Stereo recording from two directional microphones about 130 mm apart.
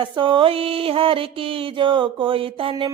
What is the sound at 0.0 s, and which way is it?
Music, 40° right (ahead or behind).